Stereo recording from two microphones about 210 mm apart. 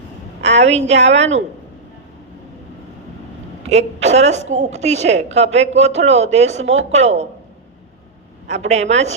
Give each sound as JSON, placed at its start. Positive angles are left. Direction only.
{"t": 0.7, "sound": "a woman's voice", "side_deg": -30}
{"t": 3.7, "sound": "a woman's voice", "side_deg": -30}
{"t": 8.4, "sound": "a woman's voice", "side_deg": -30}